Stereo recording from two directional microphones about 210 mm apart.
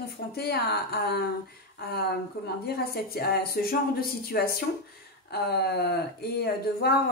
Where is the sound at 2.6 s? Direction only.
45° left (ahead or behind).